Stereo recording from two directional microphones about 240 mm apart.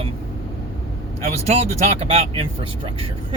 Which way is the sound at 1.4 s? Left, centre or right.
Right.